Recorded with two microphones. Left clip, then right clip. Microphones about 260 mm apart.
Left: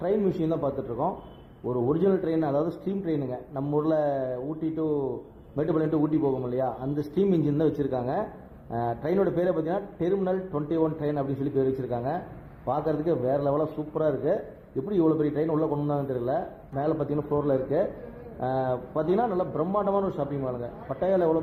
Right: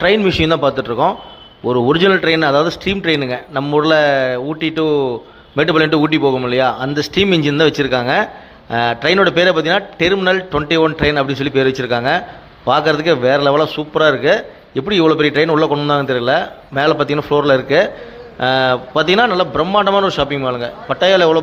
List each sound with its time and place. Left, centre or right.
0.0 s speech: right
7.8 s speech: right